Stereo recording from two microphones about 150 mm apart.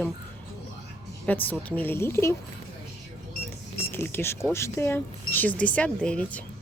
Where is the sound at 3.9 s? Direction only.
15° left (ahead or behind).